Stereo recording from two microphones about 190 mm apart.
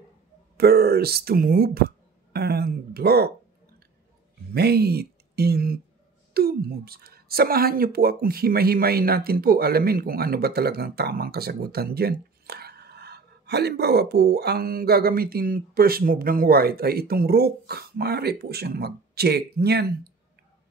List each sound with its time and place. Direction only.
0.6 s speech: 55° right (ahead or behind)
4.6 s speech: 55° right (ahead or behind)